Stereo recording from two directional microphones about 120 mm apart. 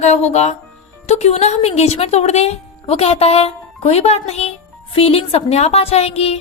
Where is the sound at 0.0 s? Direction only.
65° left (ahead or behind).